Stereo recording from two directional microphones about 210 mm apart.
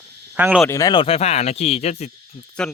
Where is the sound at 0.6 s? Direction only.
15° left (ahead or behind); by 2.1 s 30° left (ahead or behind).